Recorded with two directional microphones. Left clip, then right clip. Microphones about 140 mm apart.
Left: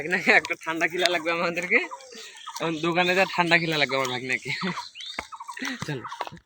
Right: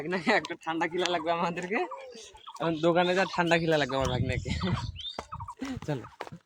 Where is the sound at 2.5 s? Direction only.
30° right (ahead or behind).